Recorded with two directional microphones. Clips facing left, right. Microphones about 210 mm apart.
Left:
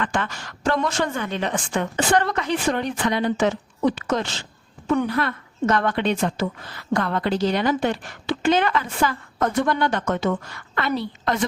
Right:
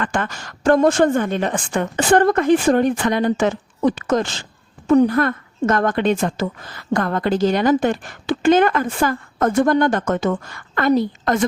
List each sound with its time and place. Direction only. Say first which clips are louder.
0.0 s a woman's voice: right 3 dB; 45° right (ahead or behind)